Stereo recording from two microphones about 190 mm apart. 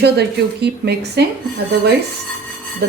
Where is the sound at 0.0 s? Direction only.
60° right (ahead or behind).